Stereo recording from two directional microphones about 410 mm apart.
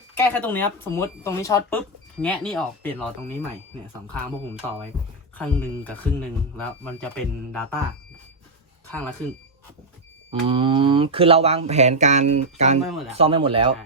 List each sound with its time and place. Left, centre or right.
0.1 s speech: centre
5.4 s speech: centre
8.9 s speech: centre
10.4 s speech: centre
12.8 s speech: centre
13.1 s speech: centre